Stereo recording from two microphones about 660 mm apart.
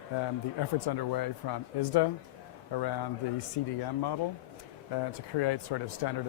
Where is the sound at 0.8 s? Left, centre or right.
Left.